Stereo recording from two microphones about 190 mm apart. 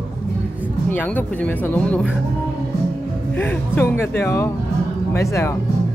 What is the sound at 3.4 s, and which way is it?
Speech, 10° left (ahead or behind).